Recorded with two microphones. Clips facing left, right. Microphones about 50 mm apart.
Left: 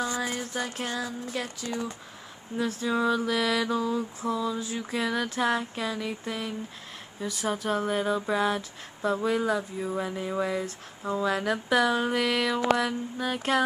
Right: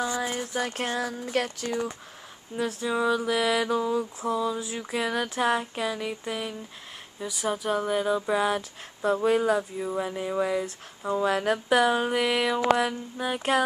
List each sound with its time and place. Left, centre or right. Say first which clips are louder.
0.0 s a sound: right 1 dB; centre
0.3 s mantra: right 2 dB; right
0.7 s a sound: right 3 dB; right
2.9 s speech: right 1 dB; centre
3.3 s mantra: right 2 dB; right
7.2 s speech: right 1 dB; centre
8.5 s mantra: right 1 dB; right
9.6 s speech: right 2 dB; centre
10.6 s a sound: right 1 dB; centre
11.2 s speech: right 3 dB; right
11.9 s a sound: right 1 dB; centre
12.7 s mantra: right 1 dB; right